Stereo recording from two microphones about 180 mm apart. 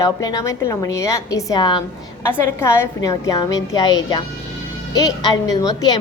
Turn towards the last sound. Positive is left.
turn(degrees=20)  # may be behind; listen again after turning